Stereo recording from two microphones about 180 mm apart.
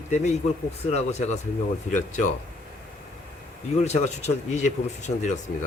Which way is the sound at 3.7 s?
35° left (ahead or behind).